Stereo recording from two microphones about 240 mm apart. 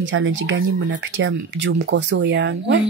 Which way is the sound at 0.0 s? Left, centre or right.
Right.